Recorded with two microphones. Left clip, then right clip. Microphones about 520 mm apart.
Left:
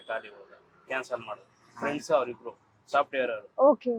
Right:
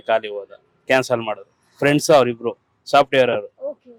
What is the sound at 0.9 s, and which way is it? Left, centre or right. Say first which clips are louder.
Speech: right 15 dB; right.